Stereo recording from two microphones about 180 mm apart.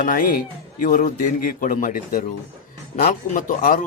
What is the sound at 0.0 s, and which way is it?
A man's voice, 45° left (ahead or behind).